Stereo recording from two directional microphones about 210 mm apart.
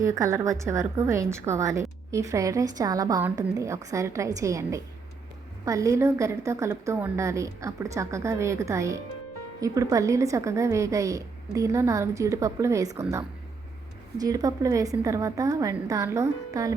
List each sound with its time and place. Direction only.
0.0 s a woman's voice: 15° right (ahead or behind)